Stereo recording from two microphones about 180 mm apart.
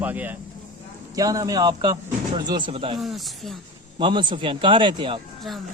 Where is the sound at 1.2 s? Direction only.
20° right (ahead or behind).